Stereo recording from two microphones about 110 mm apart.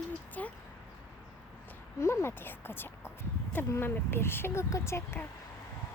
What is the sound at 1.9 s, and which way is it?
Speech, 25° left (ahead or behind).